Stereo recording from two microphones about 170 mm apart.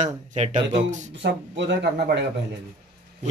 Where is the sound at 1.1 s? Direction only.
90° right.